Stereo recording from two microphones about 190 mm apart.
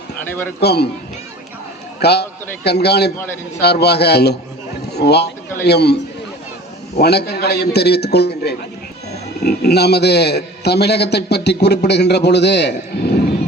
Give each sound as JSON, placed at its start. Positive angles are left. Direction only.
{"t": 0.6, "sound": "a man's voice", "side_deg": 60}
{"t": 2.0, "sound": "a man's voice", "side_deg": 60}